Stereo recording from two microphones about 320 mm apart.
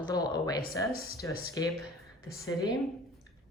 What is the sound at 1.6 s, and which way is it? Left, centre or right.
Speech, centre.